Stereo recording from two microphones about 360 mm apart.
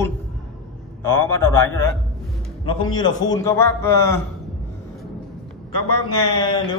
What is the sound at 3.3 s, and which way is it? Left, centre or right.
Speech, centre.